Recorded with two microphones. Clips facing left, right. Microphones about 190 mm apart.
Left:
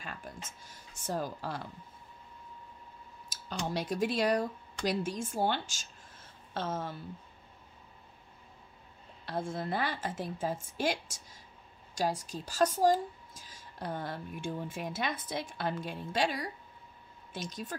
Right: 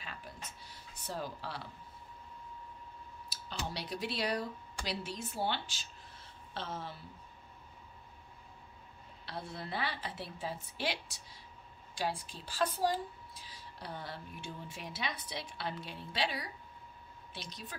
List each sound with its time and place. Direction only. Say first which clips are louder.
0.0 s a sound: left 4 dB; 50° left (ahead or behind)
3.3 s speech: left 5 dB; 45° left (ahead or behind)
9.2 s speech: left 8 dB; 50° left (ahead or behind)